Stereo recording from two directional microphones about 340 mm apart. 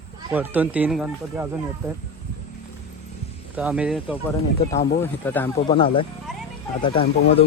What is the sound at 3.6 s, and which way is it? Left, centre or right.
Speech, centre.